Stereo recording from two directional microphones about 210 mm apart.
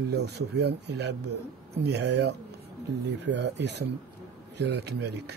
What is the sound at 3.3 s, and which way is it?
Speech, 55° right (ahead or behind).